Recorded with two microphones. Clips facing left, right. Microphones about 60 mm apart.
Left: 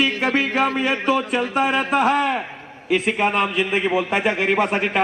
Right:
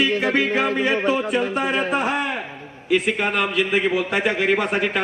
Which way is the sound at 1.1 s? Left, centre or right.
Left.